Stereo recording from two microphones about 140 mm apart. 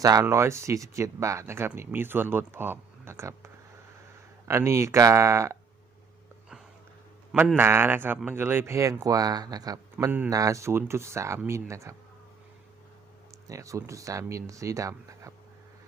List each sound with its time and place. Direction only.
0.0 s speech: 25° right (ahead or behind)
7.5 s speech: 15° right (ahead or behind)
13.5 s speech: 20° right (ahead or behind)